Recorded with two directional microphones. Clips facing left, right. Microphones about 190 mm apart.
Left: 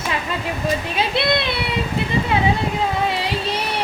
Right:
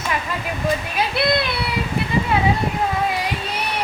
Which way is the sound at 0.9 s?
25° left (ahead or behind).